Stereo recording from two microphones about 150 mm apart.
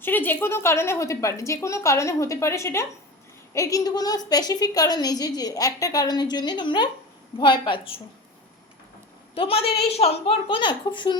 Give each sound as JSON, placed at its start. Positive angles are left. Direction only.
{"t": 0.0, "sound": "a woman's voice", "side_deg": 10}
{"t": 9.3, "sound": "a woman's voice", "side_deg": 40}